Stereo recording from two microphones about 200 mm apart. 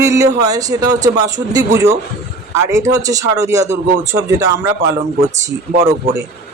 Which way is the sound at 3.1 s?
15° right (ahead or behind).